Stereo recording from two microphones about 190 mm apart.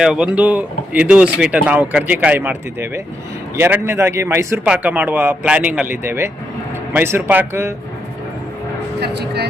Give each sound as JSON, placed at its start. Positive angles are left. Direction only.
{"t": 0.0, "sound": "speech", "side_deg": -5}
{"t": 9.0, "sound": "speech", "side_deg": -60}